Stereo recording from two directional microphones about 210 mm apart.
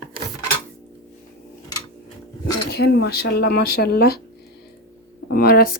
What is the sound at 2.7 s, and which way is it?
Speech, 50° left (ahead or behind).